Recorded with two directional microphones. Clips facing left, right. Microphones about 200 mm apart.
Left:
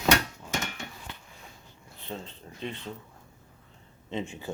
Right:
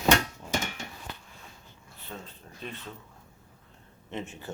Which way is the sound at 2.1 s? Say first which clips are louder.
Left 4 dB; 25° left (ahead or behind).